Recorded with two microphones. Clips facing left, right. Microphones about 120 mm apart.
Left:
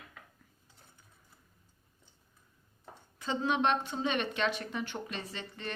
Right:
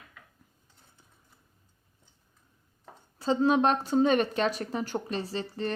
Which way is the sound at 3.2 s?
35° right (ahead or behind).